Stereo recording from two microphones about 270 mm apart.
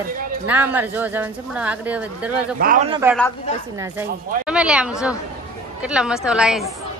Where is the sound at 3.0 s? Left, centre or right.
Centre.